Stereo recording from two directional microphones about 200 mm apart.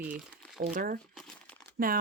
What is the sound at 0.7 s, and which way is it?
Speech, 45° right (ahead or behind).